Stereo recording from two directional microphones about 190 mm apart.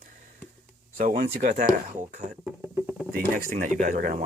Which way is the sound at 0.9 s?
45° right (ahead or behind).